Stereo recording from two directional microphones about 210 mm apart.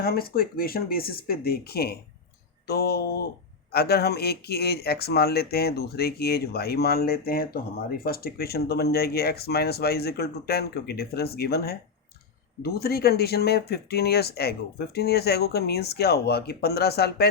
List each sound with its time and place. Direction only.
0.0 s speech: 45° left (ahead or behind)